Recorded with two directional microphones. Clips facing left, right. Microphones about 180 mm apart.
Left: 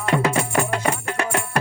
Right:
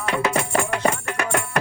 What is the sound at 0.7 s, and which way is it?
Music, 30° left (ahead or behind).